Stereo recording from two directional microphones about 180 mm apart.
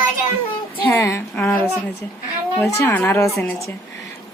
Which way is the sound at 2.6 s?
15° left (ahead or behind).